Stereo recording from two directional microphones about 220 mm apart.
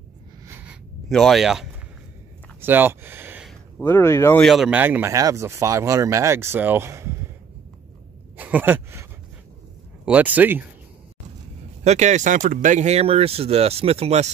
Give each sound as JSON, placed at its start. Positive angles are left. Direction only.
{"t": 0.5, "sound": "a sound", "side_deg": -10}
{"t": 3.8, "sound": "speech", "side_deg": 10}
{"t": 4.5, "sound": "speech", "side_deg": -5}
{"t": 8.4, "sound": "speech", "side_deg": -5}
{"t": 10.0, "sound": "speech", "side_deg": -5}
{"t": 11.8, "sound": "speech", "side_deg": -30}